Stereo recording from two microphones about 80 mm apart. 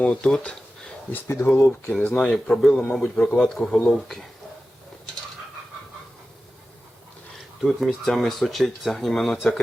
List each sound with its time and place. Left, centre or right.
0.0 s speech: centre
1.5 s speech: left
1.9 s speech: centre
7.6 s speech: centre